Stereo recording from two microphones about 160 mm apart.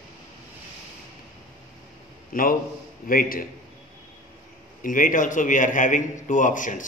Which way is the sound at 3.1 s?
60° left (ahead or behind).